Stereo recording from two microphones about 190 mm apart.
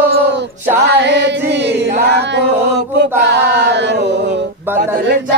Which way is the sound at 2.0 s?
65° right (ahead or behind).